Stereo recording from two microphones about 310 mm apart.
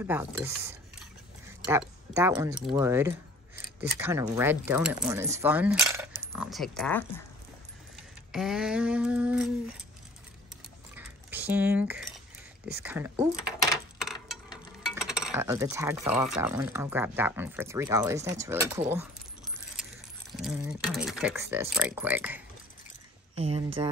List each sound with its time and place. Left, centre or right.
0.0 s speech: centre
8.3 s speech: centre
11.0 s cutlery: centre
12.8 s speech: centre
14.9 s speech: centre
20.3 s speech: centre
23.3 s speech: centre